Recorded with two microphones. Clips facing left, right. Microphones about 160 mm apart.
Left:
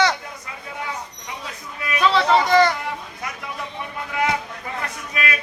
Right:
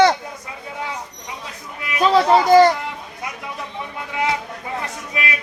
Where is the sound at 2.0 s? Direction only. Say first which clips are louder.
Right 3 dB; 40° right (ahead or behind).